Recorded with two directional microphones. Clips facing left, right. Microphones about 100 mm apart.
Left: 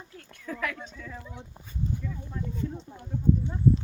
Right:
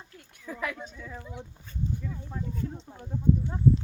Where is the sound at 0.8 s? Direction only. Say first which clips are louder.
Even; 15° right (ahead or behind).